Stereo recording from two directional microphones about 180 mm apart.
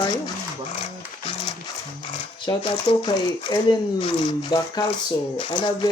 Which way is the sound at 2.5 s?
25° left (ahead or behind).